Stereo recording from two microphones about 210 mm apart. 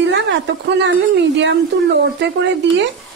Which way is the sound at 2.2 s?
55° right (ahead or behind).